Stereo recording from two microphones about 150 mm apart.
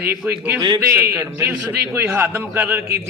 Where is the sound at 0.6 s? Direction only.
25° right (ahead or behind).